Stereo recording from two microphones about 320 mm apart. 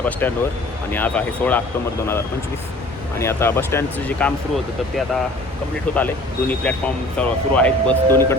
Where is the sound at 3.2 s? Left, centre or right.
Centre.